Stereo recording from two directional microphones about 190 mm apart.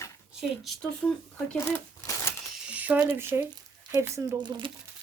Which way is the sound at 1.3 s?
10° left (ahead or behind).